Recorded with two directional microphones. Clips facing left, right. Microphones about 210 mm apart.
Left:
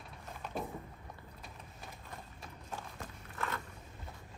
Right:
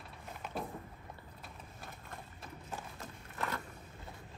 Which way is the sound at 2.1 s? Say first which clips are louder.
Right 1 dB; centre (ahead or behind).